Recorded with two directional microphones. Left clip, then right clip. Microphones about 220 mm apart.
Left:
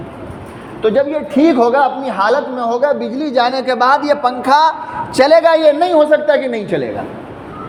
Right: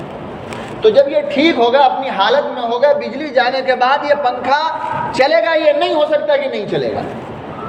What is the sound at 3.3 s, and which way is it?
A man's voice, 60° left (ahead or behind).